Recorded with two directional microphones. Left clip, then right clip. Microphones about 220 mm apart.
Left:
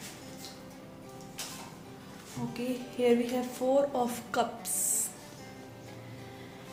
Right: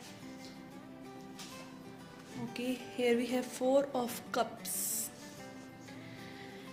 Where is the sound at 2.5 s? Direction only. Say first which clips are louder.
Left 2 dB; 35° right (ahead or behind).